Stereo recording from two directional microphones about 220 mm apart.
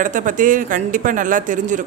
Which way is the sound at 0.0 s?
35° right (ahead or behind).